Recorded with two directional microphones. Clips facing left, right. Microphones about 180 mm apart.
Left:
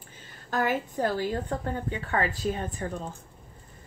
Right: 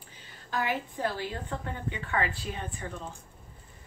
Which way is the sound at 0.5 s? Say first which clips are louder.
Left 4 dB; 45° left (ahead or behind).